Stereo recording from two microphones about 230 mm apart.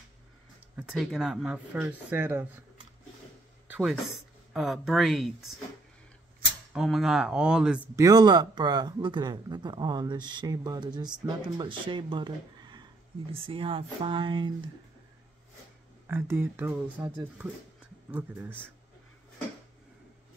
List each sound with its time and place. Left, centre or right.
0.7 s speech: centre
3.7 s speech: centre
6.7 s speech: centre; by 14.7 s right
16.1 s speech: centre